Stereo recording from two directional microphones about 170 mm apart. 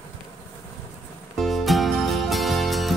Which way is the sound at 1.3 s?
Centre (ahead or behind).